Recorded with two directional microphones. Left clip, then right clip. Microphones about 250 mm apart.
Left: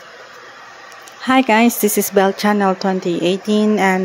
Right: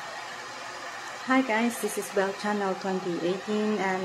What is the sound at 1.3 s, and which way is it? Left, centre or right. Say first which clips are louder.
Speech: left 12 dB; left.